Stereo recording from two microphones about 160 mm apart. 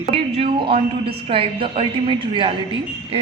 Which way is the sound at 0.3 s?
35° right (ahead or behind).